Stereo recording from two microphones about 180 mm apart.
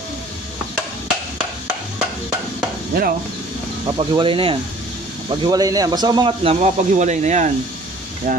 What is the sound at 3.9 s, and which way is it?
Speech, 25° right (ahead or behind).